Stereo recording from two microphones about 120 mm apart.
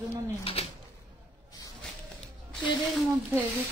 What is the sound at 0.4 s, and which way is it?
Speech, 55° left (ahead or behind).